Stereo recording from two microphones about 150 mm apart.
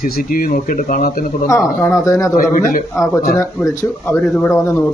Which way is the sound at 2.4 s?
65° left (ahead or behind).